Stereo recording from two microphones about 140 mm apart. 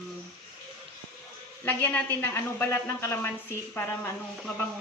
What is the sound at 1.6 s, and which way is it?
Speech, 15° left (ahead or behind).